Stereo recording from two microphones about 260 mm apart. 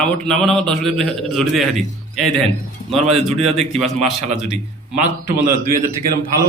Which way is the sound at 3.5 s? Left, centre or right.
Right.